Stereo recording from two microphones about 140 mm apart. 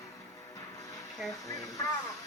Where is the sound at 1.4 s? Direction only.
25° left (ahead or behind).